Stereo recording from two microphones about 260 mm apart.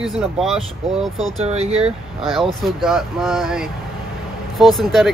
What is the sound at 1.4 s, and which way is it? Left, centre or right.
Speech, right.